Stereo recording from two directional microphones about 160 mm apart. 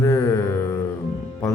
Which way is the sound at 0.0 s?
20° left (ahead or behind).